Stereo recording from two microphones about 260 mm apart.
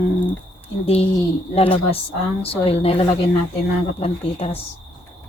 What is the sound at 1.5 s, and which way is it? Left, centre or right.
Speech, left.